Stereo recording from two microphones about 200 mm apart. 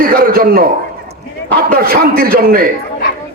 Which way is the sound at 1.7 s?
45° right (ahead or behind).